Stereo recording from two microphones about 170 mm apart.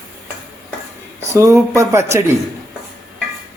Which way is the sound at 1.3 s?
15° right (ahead or behind).